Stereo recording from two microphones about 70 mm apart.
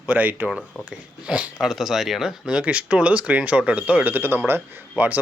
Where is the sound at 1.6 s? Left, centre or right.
Centre; by 5.2 s right.